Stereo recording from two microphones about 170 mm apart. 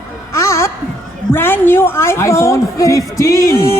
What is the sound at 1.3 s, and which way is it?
A woman's voice, 15° left (ahead or behind).